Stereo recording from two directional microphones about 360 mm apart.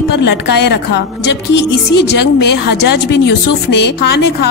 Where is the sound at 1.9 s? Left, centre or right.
Left.